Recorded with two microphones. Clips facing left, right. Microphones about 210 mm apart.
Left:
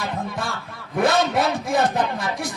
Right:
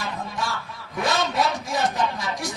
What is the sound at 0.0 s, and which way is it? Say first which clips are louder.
Music: left 3 dB; 60° left (ahead or behind).